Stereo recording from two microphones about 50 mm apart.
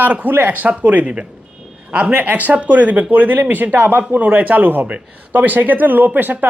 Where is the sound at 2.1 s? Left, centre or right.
Right.